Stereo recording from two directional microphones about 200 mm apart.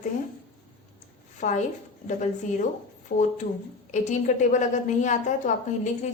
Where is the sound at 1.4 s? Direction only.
40° left (ahead or behind).